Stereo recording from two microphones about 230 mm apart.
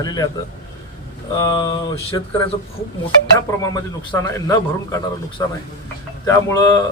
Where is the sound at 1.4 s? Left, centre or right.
Centre.